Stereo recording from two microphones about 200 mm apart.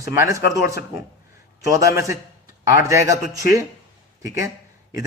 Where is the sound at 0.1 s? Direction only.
15° right (ahead or behind).